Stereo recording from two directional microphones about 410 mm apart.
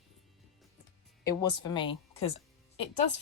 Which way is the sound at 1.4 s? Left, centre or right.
Centre.